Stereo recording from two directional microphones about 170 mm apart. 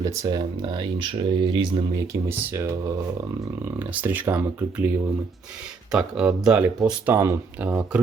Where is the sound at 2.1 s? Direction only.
25° right (ahead or behind).